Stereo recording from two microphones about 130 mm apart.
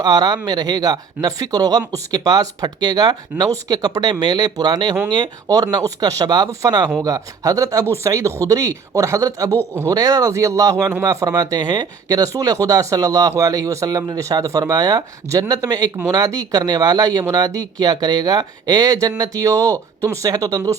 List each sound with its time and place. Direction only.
0.0 s speech: 30° right (ahead or behind)